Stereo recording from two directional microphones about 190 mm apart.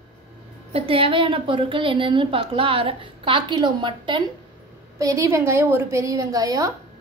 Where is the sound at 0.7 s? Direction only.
30° right (ahead or behind).